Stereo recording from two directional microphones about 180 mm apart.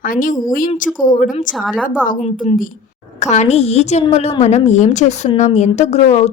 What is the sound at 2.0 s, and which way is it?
A woman's voice, 45° left (ahead or behind).